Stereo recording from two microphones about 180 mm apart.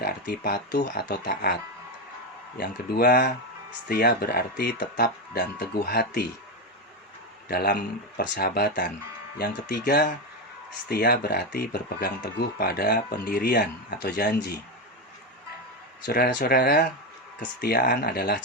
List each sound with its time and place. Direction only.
0.0 s speech: 60° left (ahead or behind)
2.6 s speech: 60° left (ahead or behind)
7.4 s speech: 60° left (ahead or behind)
16.0 s speech: 60° left (ahead or behind)